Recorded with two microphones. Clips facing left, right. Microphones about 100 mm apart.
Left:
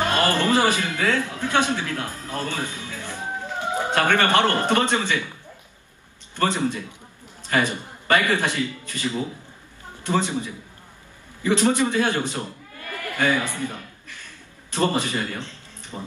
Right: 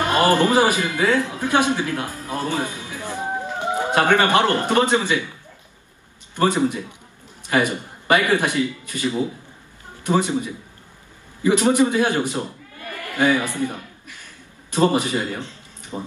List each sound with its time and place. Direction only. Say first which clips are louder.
0.0 s a man's voice: right 4 dB; 15° right (ahead or behind)
6.3 s a man's voice: right 4 dB; 15° right (ahead or behind)
12.9 s chuckle: right 3 dB; 15° right (ahead or behind)
14.7 s a man's voice: right 4 dB; 15° right (ahead or behind)